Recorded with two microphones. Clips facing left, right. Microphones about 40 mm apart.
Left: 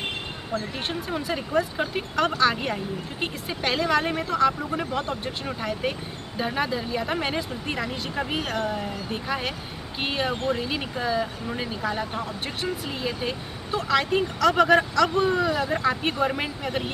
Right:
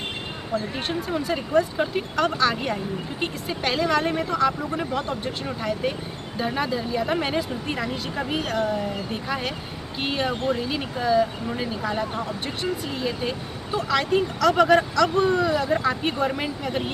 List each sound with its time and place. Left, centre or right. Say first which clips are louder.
0.7 s speech: right 3 dB; centre